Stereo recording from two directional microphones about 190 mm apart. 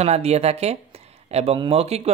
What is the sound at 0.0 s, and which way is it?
Speech, 35° right (ahead or behind).